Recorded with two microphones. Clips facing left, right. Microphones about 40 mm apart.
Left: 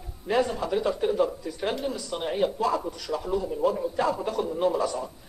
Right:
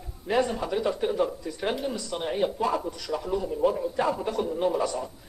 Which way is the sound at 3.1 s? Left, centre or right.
Centre.